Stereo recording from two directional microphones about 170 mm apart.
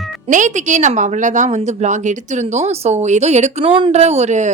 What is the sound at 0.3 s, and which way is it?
A woman's voice, 45° right (ahead or behind).